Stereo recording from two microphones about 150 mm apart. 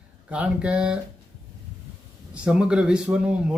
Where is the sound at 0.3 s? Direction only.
10° right (ahead or behind).